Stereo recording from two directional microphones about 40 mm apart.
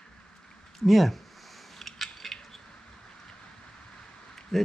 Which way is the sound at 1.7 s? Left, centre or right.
Centre.